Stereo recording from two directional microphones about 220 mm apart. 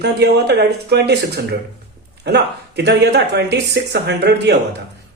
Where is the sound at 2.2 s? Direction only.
50° right (ahead or behind).